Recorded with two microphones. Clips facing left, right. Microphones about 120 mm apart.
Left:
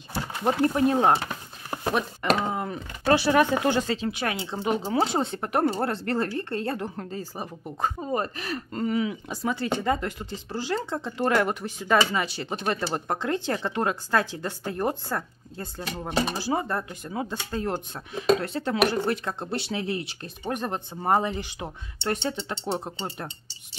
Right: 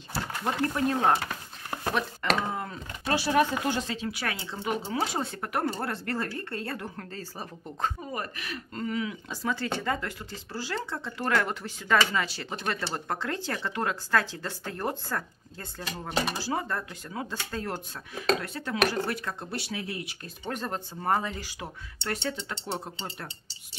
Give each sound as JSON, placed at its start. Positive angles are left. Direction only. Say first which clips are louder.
{"t": 0.1, "sound": "a sound", "louder": "left 5 dB", "side_deg": 15}
{"t": 2.5, "sound": "typing", "louder": "left 4 dB", "side_deg": 20}
{"t": 3.1, "sound": "speech", "louder": "left 5 dB", "side_deg": 80}
{"t": 3.9, "sound": "speech", "louder": "left 5 dB", "side_deg": 25}
{"t": 8.0, "sound": "speech", "louder": "left 7 dB", "side_deg": 30}
{"t": 8.8, "sound": "speech", "louder": "left 5 dB", "side_deg": 20}
{"t": 20.5, "sound": "speech", "louder": "left 3 dB", "side_deg": 15}